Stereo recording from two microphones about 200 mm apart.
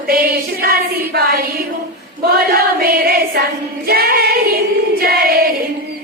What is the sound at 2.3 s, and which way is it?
Choir, 50° right (ahead or behind).